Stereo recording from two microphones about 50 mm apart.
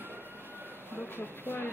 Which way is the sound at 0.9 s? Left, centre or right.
Left.